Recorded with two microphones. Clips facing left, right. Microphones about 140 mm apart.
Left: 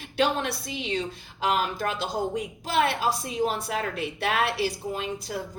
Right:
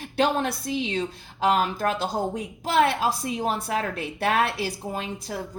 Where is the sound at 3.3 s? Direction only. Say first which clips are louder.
Right 1 dB; 50° right (ahead or behind).